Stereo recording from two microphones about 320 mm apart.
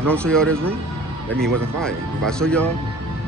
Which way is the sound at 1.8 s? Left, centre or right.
Centre.